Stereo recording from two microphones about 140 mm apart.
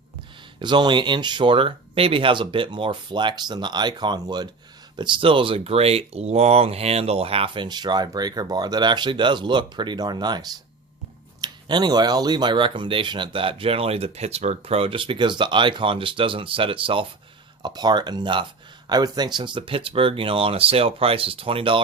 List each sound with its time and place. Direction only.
0.6 s speech: 35° right (ahead or behind)